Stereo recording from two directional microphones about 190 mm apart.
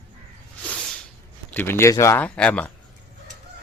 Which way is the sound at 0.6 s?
5° left (ahead or behind).